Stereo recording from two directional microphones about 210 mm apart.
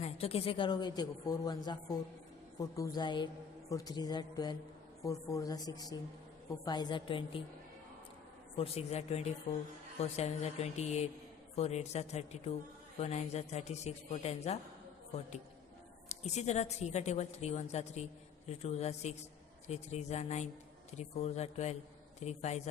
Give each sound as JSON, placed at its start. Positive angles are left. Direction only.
{"t": 0.0, "sound": "a woman's voice", "side_deg": 30}
{"t": 8.5, "sound": "a woman's voice", "side_deg": 30}
{"t": 16.0, "sound": "a woman's voice", "side_deg": 30}